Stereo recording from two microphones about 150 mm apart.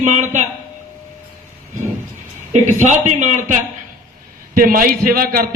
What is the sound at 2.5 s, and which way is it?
A man's voice, 50° right (ahead or behind).